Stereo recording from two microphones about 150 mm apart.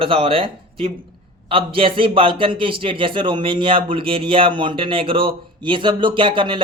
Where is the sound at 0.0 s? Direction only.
40° right (ahead or behind).